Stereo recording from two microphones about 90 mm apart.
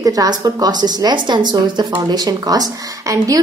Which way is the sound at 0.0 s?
40° right (ahead or behind).